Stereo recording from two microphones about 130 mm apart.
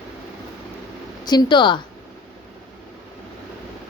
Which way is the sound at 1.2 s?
35° left (ahead or behind).